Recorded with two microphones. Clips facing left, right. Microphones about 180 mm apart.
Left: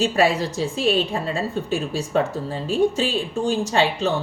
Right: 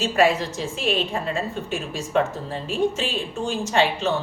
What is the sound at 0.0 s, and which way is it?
A woman's voice, 35° left (ahead or behind).